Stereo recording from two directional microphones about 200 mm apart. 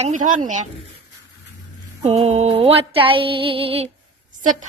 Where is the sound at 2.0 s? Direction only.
35° right (ahead or behind).